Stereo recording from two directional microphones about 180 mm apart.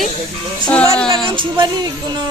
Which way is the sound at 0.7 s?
5° left (ahead or behind).